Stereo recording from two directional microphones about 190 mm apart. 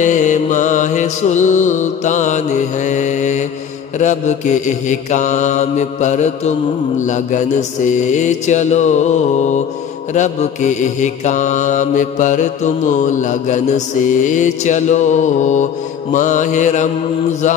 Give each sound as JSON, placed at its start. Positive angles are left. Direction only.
{"t": 0.0, "sound": "mantra", "side_deg": 40}